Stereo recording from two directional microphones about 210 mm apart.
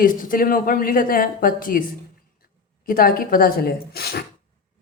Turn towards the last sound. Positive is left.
turn(degrees=50)  # may be behind; listen again after turning